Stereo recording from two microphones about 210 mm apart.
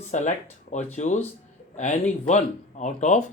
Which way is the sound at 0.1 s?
35° left (ahead or behind).